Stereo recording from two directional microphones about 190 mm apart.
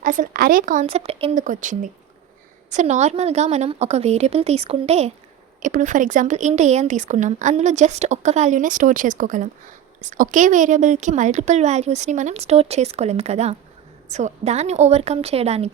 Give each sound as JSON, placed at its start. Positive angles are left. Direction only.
{"t": 0.0, "sound": "speech", "side_deg": -45}
{"t": 1.4, "sound": "speech", "side_deg": -45}